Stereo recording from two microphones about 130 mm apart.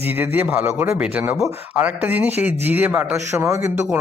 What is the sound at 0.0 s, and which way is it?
Speech, 15° right (ahead or behind).